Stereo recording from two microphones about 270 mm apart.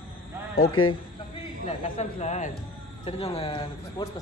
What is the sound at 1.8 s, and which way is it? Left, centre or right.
A man's voice, left.